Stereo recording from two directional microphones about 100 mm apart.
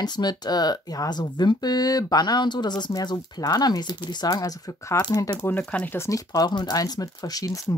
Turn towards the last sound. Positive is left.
turn(degrees=35)  # may be behind; listen again after turning